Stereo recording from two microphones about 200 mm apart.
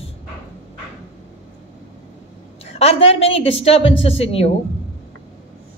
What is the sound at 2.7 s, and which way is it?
Speech, 30° left (ahead or behind).